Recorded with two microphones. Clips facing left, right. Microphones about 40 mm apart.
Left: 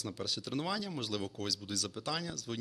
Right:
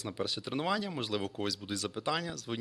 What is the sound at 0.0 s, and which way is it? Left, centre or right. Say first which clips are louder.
Speech: right 3 dB; centre.